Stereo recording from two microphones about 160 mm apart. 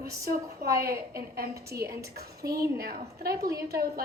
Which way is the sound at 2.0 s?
80° right.